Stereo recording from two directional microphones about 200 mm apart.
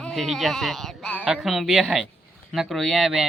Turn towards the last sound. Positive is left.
turn(degrees=0)  # may be behind; listen again after turning